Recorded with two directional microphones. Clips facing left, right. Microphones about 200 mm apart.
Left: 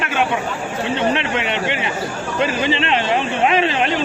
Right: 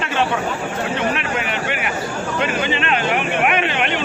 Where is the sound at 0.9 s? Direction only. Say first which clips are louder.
Left 5 dB; 25° left (ahead or behind).